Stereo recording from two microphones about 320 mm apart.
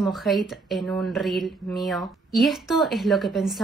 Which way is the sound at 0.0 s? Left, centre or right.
Centre.